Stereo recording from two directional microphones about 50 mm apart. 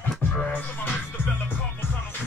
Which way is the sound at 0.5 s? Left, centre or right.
Left.